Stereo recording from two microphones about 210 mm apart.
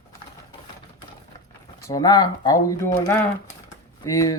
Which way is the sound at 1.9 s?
15° left (ahead or behind).